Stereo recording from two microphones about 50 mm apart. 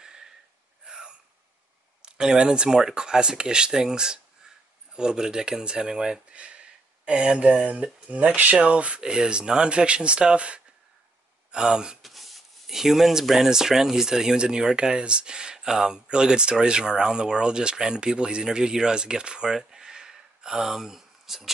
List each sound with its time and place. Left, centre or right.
0.0 s gasp: centre
2.0 s speech: centre
2.8 s rub: centre
6.3 s speech: right
11.5 s rub: centre
12.0 s rub: centre
16.5 s speech: centre